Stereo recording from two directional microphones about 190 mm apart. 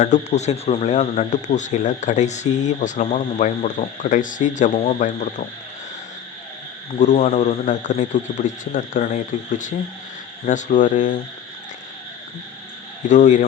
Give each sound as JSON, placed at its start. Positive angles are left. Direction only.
{"t": 0.0, "sound": "speech", "side_deg": 40}
{"t": 7.0, "sound": "a man's voice", "side_deg": 40}
{"t": 13.1, "sound": "speech", "side_deg": 40}